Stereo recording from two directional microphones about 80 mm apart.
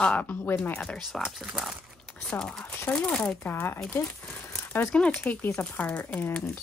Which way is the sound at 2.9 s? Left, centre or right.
Centre.